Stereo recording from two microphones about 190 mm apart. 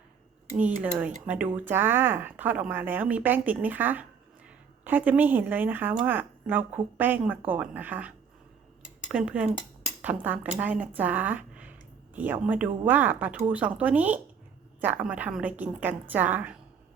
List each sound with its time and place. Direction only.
0.8 s speech: 5° right (ahead or behind)